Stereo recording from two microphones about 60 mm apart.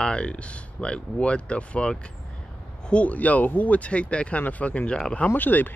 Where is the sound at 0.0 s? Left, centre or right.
Centre.